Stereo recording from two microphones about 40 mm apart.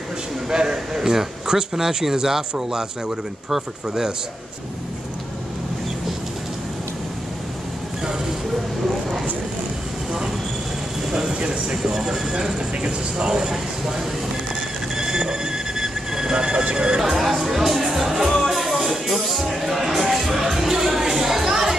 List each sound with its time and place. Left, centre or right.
0.5 s speech: centre
11.1 s speech: centre
15.0 s a sound: centre
17.0 s music: centre